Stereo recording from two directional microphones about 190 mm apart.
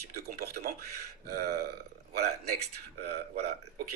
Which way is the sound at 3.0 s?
60° right (ahead or behind).